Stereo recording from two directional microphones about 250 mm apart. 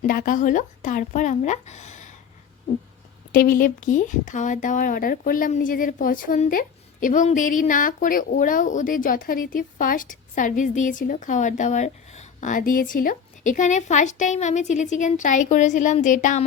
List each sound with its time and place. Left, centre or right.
0.0 s speech: left
3.3 s a woman's voice: left